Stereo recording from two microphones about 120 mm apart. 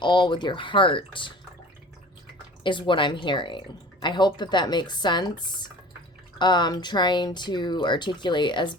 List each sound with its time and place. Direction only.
0.0 s speech: 40° left (ahead or behind)
2.6 s speech: 45° left (ahead or behind)
6.4 s speech: 40° left (ahead or behind)